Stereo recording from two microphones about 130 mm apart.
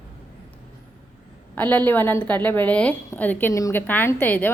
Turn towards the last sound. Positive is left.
turn(degrees=15)  # may be behind; listen again after turning